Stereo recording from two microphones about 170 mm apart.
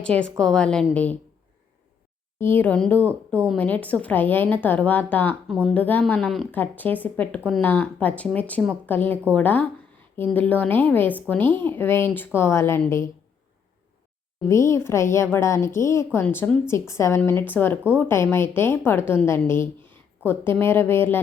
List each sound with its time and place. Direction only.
0.2 s a woman's voice: 5° left (ahead or behind)
2.4 s a woman's voice: 10° left (ahead or behind)
14.4 s a woman's voice: 15° left (ahead or behind)